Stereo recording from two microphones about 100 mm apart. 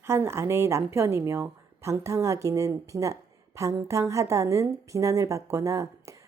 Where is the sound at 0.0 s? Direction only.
25° right (ahead or behind).